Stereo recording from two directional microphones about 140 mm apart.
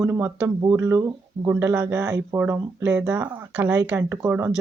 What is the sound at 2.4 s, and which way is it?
Speech, 10° right (ahead or behind).